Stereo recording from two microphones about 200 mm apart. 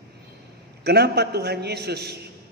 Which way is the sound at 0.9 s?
55° right (ahead or behind).